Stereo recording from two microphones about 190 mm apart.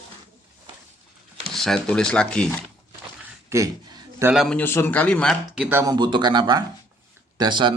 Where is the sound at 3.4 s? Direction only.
15° right (ahead or behind).